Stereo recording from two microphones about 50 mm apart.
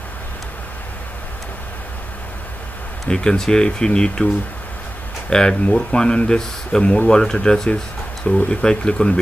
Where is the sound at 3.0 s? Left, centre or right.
Centre.